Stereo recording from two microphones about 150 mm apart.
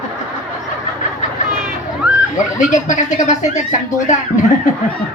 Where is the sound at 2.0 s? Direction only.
5° right (ahead or behind).